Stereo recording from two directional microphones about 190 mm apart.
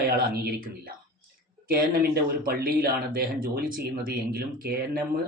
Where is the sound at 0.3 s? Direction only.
50° right (ahead or behind).